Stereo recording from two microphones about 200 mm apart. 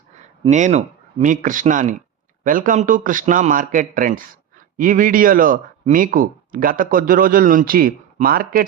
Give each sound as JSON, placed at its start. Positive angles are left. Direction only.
{"t": 0.2, "sound": "a man's voice", "side_deg": -35}